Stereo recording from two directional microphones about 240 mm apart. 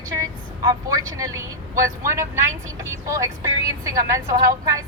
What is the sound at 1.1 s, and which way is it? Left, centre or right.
A woman's voice, centre.